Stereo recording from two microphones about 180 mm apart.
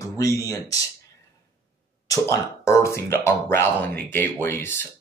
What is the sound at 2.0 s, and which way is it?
Speech, 15° left (ahead or behind).